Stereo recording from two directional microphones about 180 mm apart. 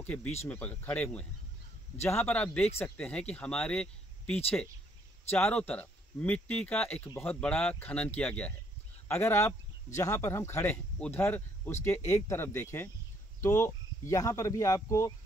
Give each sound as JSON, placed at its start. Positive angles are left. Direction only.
{"t": 0.0, "sound": "speech", "side_deg": 10}